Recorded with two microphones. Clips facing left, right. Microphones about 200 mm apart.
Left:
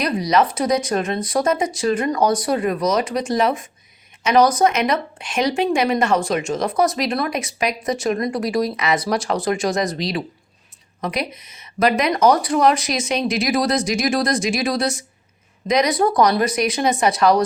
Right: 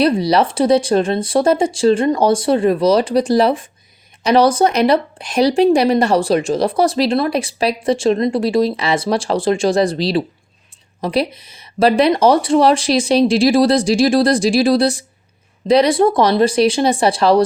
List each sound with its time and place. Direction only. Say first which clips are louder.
0.0 s speech: right 5 dB; 30° right (ahead or behind)